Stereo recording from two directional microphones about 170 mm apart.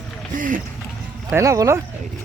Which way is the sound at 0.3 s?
50° right (ahead or behind).